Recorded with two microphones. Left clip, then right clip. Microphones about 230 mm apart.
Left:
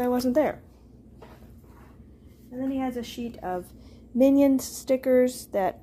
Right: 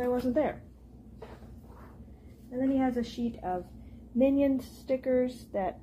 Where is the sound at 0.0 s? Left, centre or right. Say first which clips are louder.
Left 5 dB; left.